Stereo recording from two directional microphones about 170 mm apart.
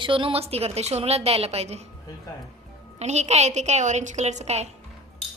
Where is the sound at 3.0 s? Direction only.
40° right (ahead or behind).